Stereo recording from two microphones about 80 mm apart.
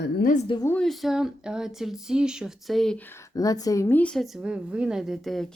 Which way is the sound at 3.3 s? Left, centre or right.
Left.